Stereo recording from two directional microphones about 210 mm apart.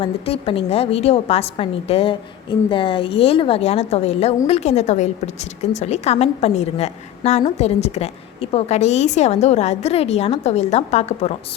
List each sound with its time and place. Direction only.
0.0 s a woman's voice: 25° left (ahead or behind)